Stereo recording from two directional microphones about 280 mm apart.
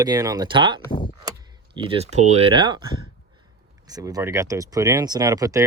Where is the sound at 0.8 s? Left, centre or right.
Centre.